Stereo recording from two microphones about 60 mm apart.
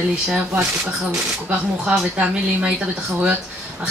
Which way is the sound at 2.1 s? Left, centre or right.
Right.